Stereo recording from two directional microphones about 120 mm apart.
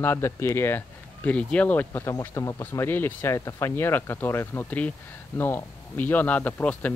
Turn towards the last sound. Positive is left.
turn(degrees=10)  # may be behind; listen again after turning